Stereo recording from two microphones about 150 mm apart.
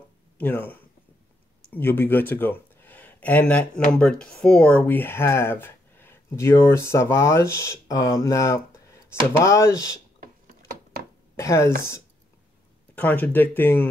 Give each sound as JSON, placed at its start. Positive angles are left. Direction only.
{"t": 0.4, "sound": "speech", "side_deg": 10}
{"t": 11.3, "sound": "speech", "side_deg": 20}
{"t": 12.9, "sound": "speech", "side_deg": 10}